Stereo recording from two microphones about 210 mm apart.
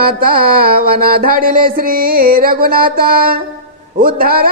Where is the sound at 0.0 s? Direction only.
45° right (ahead or behind).